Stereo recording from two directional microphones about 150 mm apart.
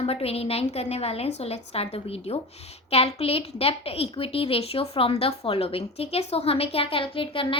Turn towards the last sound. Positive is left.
turn(degrees=35)  # may be behind; listen again after turning